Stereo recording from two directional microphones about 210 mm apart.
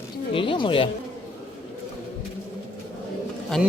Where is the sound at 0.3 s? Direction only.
25° left (ahead or behind).